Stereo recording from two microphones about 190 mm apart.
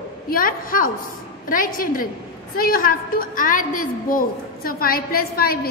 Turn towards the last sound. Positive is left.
turn(degrees=50)  # may be behind; listen again after turning